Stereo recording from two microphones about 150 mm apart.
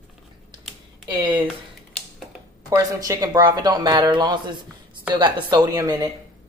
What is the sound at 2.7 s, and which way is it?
Speech, 20° right (ahead or behind).